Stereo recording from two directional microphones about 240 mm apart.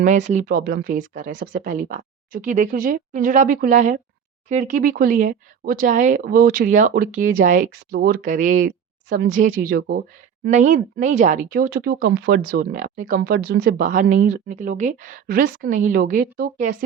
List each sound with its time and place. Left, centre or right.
0.0 s speech: right